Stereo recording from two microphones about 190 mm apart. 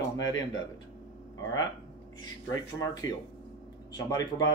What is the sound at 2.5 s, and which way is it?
Speech, 20° left (ahead or behind).